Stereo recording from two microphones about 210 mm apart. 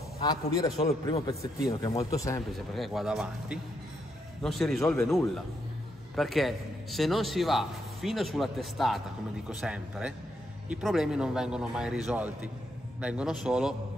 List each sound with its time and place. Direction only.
0.2 s a man's voice: 25° left (ahead or behind)
2.5 s a man's voice: centre (ahead or behind)
13.0 s a man's voice: 5° right (ahead or behind)